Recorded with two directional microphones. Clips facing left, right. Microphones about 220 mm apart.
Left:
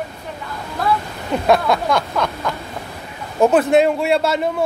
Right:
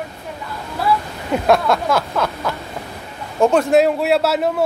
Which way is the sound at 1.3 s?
Centre (ahead or behind).